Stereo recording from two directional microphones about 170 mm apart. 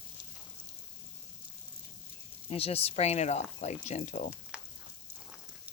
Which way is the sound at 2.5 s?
35° left (ahead or behind).